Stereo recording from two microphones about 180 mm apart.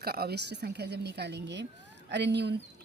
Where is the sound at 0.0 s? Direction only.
60° right (ahead or behind).